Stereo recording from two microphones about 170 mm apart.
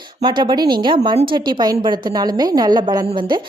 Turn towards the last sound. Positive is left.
turn(degrees=-30)  # may be behind; listen again after turning